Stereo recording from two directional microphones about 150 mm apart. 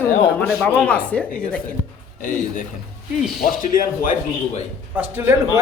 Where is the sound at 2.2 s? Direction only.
65° left (ahead or behind).